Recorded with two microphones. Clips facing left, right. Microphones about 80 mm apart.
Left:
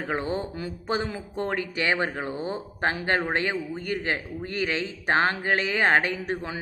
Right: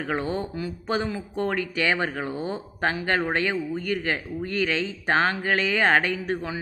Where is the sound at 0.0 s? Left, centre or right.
Left.